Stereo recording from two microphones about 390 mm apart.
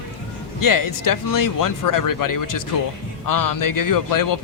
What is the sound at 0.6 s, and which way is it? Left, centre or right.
Speech, left.